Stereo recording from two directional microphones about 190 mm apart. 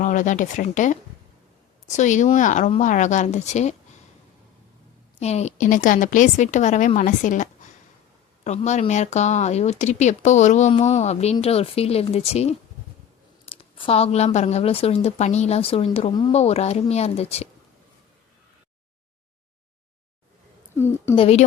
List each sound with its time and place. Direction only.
0.0 s speech: 40° left (ahead or behind)
5.2 s speech: 35° left (ahead or behind)
8.4 s speech: 35° left (ahead or behind)
20.7 s a woman's voice: 15° left (ahead or behind)
21.2 s speech: 35° left (ahead or behind)